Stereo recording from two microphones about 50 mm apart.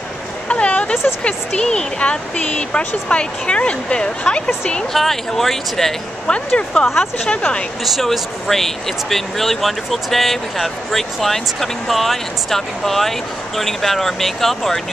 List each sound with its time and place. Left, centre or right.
0.5 s a sound: left
1.5 s speech: centre
4.9 s speech: centre
6.2 s speech: centre
7.8 s speech: centre